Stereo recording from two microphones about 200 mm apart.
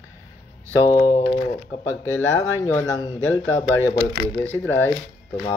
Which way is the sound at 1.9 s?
15° left (ahead or behind).